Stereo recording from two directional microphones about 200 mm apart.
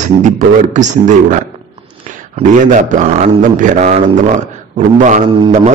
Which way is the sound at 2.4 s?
40° right (ahead or behind).